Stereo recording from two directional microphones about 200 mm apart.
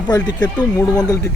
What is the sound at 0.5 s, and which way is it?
Speech, 10° left (ahead or behind).